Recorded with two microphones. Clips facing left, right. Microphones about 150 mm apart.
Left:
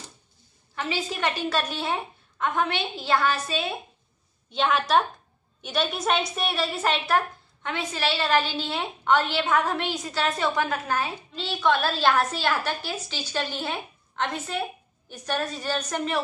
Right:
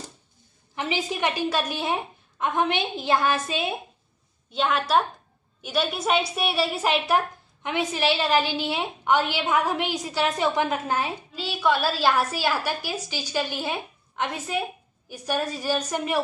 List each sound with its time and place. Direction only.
0.7 s a woman's voice: 15° right (ahead or behind)
4.5 s a woman's voice: centre (ahead or behind)
11.3 s a woman's voice: 5° right (ahead or behind)